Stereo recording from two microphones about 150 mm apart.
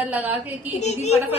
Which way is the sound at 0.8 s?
50° left (ahead or behind).